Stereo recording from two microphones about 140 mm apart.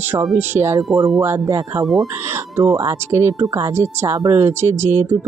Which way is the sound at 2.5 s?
25° right (ahead or behind).